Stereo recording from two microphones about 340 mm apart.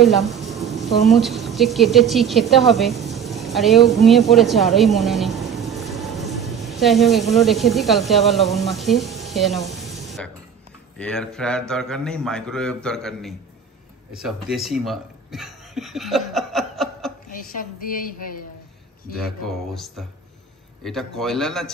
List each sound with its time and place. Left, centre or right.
0.0 s a woman's voice: centre
14.1 s a sound: centre
17.3 s a woman's voice: left
19.1 s a man's voice: centre